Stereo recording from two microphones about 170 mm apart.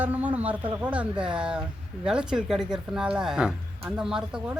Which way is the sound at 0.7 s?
5° right (ahead or behind).